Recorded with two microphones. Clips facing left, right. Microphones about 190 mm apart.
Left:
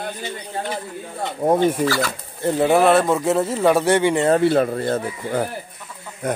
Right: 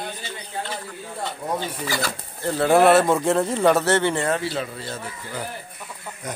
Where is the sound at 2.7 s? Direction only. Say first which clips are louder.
Right 1 dB; centre (ahead or behind).